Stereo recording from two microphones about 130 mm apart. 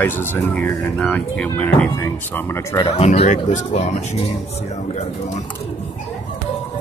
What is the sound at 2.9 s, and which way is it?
Speech, 55° left (ahead or behind).